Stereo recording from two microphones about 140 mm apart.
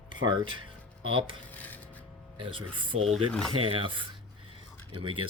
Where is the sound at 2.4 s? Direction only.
35° right (ahead or behind).